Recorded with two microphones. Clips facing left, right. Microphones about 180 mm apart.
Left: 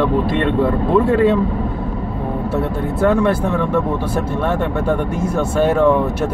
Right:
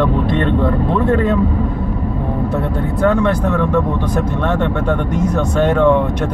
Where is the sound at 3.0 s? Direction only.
5° left (ahead or behind).